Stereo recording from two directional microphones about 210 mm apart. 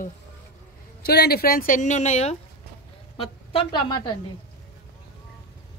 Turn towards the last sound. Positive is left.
turn(degrees=20)  # may be behind; listen again after turning